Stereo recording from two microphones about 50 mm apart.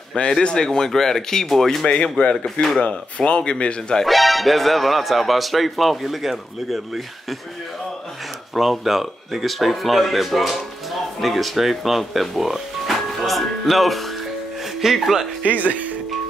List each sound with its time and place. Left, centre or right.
0.1 s speech: centre
2.2 s speech: left
4.0 s speech: centre
8.5 s speech: centre
15.4 s speech: right